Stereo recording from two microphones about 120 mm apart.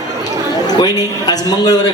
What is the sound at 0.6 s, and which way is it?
A man's voice, 35° left (ahead or behind).